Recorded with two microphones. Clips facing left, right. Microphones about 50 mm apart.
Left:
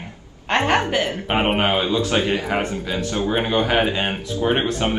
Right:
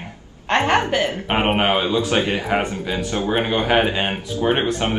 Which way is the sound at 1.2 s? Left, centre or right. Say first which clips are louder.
Even; centre.